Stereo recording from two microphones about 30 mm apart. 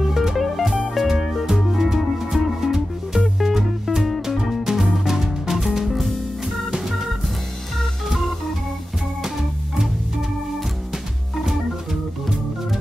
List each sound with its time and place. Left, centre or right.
0.1 s music: centre
0.4 s music: centre
6.7 s organ: centre